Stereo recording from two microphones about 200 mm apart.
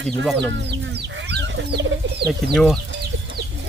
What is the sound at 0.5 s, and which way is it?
Speech, 60° right (ahead or behind).